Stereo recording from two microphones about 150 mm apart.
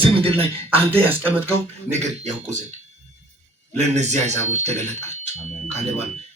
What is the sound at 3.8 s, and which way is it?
Speech, 50° right (ahead or behind).